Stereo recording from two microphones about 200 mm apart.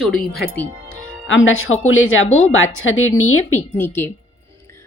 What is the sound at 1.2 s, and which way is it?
Speech, 70° left (ahead or behind).